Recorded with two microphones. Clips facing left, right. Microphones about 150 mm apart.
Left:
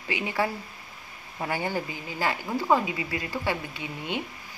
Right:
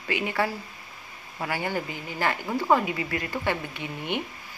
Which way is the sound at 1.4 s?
20° left (ahead or behind).